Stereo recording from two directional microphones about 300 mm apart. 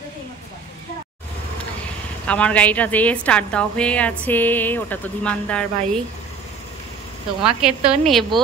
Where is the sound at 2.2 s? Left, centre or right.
Centre.